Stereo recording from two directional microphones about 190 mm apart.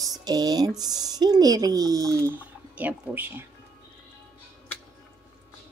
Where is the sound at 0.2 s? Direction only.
20° right (ahead or behind).